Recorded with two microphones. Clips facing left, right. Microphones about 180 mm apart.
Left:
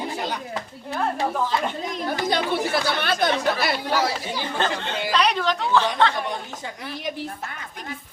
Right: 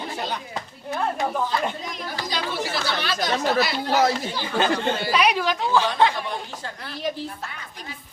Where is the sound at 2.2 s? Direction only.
55° left (ahead or behind).